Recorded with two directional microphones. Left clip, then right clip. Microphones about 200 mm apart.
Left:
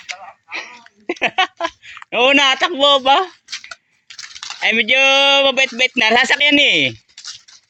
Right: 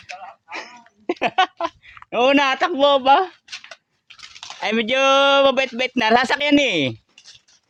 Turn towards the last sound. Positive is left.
turn(degrees=-20)  # may be behind; listen again after turning